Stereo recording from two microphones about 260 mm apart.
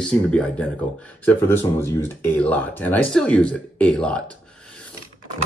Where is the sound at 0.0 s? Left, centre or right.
Centre.